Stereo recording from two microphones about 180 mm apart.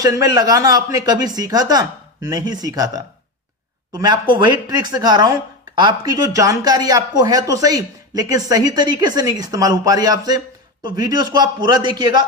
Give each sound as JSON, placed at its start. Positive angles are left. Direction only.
{"t": 0.0, "sound": "speech", "side_deg": -20}
{"t": 3.9, "sound": "speech", "side_deg": -25}